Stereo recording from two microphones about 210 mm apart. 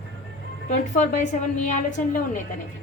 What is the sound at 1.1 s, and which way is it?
Speech, 35° left (ahead or behind).